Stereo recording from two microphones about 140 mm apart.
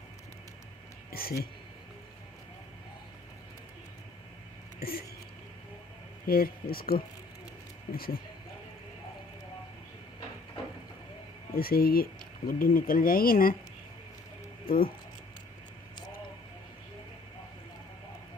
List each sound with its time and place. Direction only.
1.1 s speech: 90° left
4.8 s a sound: 90° left
6.2 s speech: 90° left
11.5 s speech: 90° left
14.7 s speech: 90° left